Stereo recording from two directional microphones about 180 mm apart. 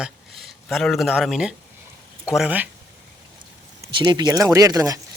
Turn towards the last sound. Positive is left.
turn(degrees=-20)  # may be behind; listen again after turning